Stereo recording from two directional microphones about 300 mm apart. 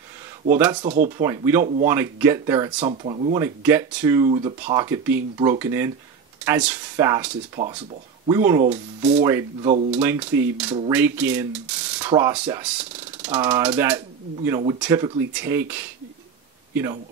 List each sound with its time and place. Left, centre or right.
0.5 s speech: centre
0.8 s speech: right
1.1 s speech: centre
3.3 s speech: centre
7.5 s speech: centre
10.9 s mechanisms: centre
12.1 s speech: centre